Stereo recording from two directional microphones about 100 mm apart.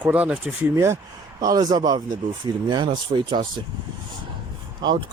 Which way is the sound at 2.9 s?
55° right (ahead or behind).